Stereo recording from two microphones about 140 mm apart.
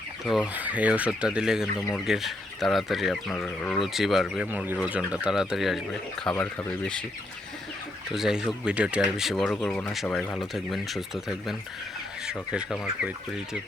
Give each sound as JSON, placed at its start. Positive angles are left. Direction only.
{"t": 0.3, "sound": "speech", "side_deg": 0}
{"t": 3.4, "sound": "speech", "side_deg": 15}
{"t": 3.8, "sound": "speech", "side_deg": 0}
{"t": 6.3, "sound": "speech", "side_deg": 15}
{"t": 8.1, "sound": "speech", "side_deg": -5}